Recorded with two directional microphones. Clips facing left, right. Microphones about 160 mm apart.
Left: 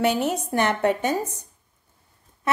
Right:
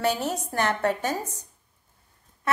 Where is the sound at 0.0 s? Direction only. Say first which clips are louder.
Left 4 dB; 20° left (ahead or behind).